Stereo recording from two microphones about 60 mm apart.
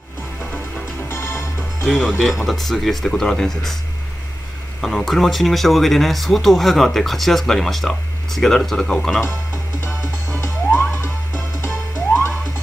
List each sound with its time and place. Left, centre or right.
1.0 s music: left
1.9 s speech: centre
4.8 s speech: centre
9.8 s frog: left